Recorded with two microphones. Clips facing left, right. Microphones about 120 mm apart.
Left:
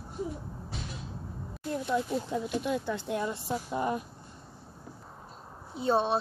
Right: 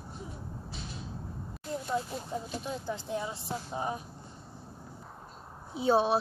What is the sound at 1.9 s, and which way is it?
Speech, 70° left (ahead or behind).